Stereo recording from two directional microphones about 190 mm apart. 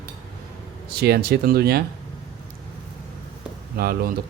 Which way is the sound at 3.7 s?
55° right (ahead or behind).